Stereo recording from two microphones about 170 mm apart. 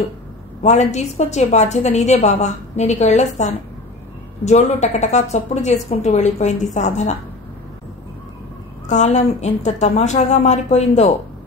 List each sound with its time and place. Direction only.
0.6 s a woman's voice: 40° left (ahead or behind)
8.8 s a woman's voice: 45° left (ahead or behind)